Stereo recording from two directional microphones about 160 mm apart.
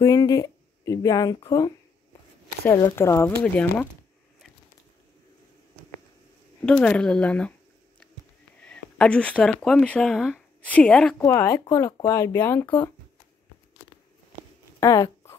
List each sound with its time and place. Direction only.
0.0 s speech: 25° left (ahead or behind)
6.6 s speech: 5° left (ahead or behind)
8.6 s speech: 5° left (ahead or behind)
11.2 s speech: 20° left (ahead or behind)
14.8 s speech: 20° left (ahead or behind)